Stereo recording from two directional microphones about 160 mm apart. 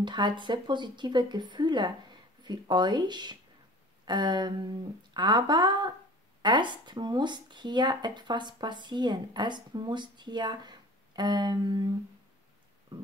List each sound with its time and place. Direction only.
0.0 s speech: 30° right (ahead or behind)